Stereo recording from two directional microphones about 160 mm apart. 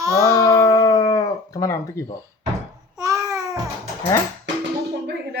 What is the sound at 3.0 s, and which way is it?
Babbling, 20° right (ahead or behind).